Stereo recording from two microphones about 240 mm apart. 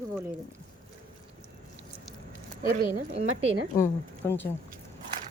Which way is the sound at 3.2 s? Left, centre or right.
Right.